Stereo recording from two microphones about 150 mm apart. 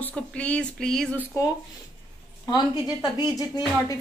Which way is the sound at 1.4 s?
20° left (ahead or behind).